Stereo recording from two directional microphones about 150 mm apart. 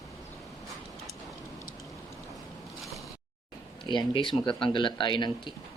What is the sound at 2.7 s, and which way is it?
Zipper, centre (ahead or behind).